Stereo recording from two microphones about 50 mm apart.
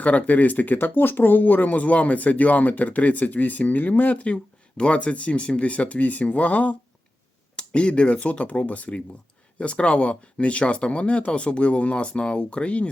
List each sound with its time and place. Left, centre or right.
0.0 s speech: left
7.5 s speech: left